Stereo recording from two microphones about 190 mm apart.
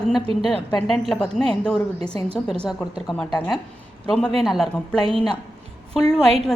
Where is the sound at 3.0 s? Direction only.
5° left (ahead or behind).